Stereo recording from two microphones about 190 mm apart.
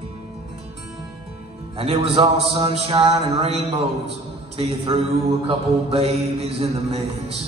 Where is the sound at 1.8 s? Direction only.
30° right (ahead or behind).